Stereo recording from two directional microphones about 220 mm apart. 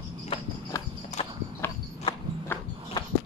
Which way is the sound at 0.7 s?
15° left (ahead or behind).